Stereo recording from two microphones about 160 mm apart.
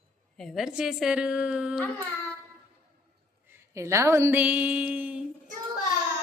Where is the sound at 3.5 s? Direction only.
15° right (ahead or behind).